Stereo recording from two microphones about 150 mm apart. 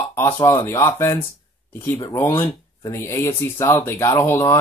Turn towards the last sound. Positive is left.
turn(degrees=15)  # may be behind; listen again after turning